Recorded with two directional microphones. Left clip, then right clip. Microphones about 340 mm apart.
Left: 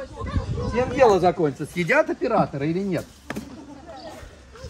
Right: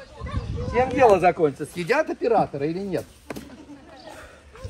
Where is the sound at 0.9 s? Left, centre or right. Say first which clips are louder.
Even; right.